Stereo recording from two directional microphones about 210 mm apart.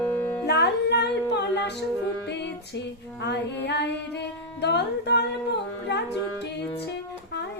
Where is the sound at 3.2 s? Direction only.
55° left (ahead or behind).